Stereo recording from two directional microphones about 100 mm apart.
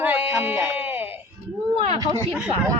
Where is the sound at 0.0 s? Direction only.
20° right (ahead or behind).